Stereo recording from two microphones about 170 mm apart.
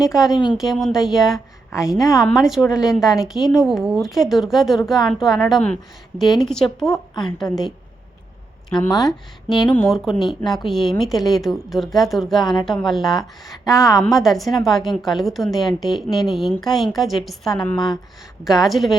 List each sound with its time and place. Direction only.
0.0 s a woman's voice: centre (ahead or behind)
2.4 s a woman's voice: 5° right (ahead or behind)
9.0 s a woman's voice: centre (ahead or behind)